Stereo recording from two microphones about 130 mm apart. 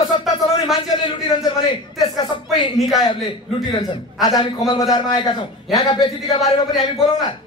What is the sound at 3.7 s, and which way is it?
A man's voice, 35° left (ahead or behind).